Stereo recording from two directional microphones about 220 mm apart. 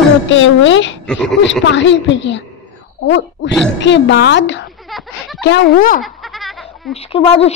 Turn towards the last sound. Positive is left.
turn(degrees=25)  # may be behind; listen again after turning